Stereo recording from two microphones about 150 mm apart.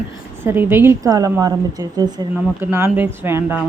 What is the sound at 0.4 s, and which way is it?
A woman's voice, 15° right (ahead or behind).